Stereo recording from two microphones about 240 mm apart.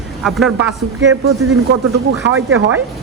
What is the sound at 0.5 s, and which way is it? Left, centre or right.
Speech, right.